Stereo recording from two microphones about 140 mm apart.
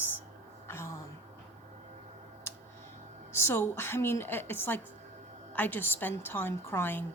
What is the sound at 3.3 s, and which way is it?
A woman's voice, 15° left (ahead or behind).